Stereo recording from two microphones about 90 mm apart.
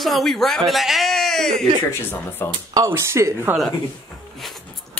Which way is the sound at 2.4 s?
30° left (ahead or behind).